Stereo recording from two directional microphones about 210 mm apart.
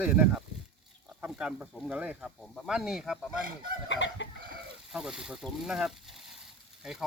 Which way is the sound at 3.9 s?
60° left (ahead or behind).